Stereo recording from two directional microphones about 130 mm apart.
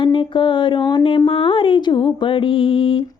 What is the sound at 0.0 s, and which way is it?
Music, 40° left (ahead or behind).